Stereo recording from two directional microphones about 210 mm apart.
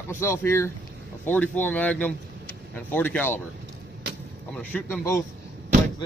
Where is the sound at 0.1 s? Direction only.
10° left (ahead or behind).